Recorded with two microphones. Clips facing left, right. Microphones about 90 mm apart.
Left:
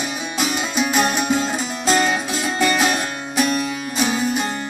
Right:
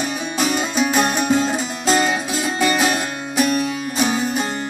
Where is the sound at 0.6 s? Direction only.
35° right (ahead or behind).